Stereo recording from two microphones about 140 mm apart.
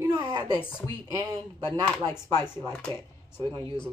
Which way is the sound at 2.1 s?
15° left (ahead or behind).